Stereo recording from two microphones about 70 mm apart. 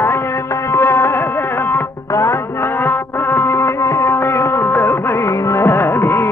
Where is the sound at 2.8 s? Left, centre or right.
Left.